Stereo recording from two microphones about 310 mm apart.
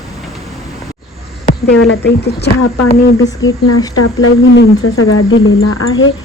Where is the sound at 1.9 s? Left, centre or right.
Left.